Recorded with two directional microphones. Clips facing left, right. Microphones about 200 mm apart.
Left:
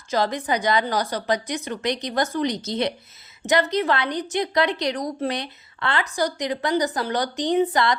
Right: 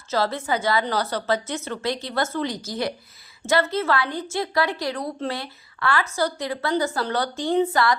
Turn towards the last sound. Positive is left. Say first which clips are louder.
# even
turn(degrees=20)  # may be behind; listen again after turning